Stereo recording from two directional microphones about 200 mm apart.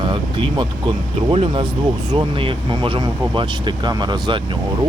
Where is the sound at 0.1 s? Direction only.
25° right (ahead or behind).